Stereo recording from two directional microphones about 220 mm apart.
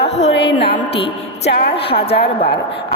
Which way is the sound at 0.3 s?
50° left (ahead or behind).